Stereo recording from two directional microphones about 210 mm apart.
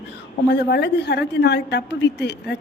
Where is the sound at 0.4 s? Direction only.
55° left (ahead or behind).